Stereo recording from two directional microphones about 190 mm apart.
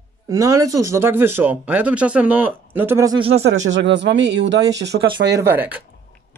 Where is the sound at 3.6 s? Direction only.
70° right (ahead or behind).